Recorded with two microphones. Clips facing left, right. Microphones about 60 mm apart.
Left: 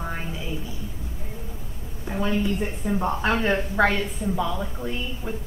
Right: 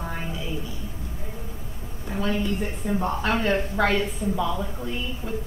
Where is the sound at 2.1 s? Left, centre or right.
Centre.